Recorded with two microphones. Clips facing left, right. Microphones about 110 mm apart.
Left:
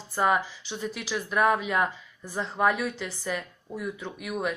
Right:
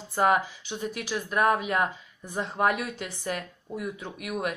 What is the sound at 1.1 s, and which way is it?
Speech, 5° right (ahead or behind).